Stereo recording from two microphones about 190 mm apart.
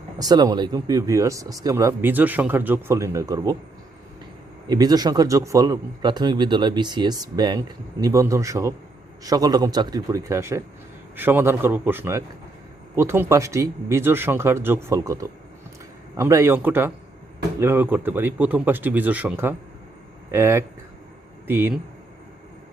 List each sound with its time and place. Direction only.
0.2 s speech: 20° right (ahead or behind)
4.7 s a man's voice: 20° right (ahead or behind)